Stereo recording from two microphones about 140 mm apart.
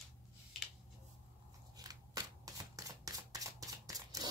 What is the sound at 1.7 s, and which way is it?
Rub, 25° right (ahead or behind).